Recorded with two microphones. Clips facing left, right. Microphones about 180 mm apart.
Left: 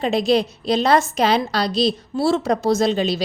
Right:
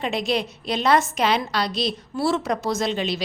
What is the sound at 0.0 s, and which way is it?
A woman's voice, 35° left (ahead or behind).